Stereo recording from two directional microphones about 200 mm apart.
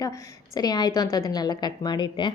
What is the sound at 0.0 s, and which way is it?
A woman's voice, 15° left (ahead or behind).